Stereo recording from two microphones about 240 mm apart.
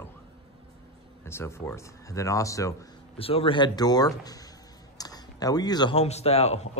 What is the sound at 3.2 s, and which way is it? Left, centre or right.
A man's voice, left.